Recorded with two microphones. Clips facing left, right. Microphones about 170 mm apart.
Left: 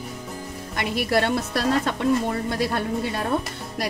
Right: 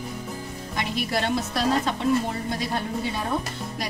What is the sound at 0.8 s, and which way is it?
Speech, 60° left (ahead or behind).